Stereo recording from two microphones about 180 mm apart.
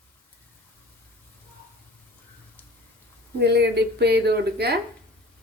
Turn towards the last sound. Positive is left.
turn(degrees=-65)  # may be behind; listen again after turning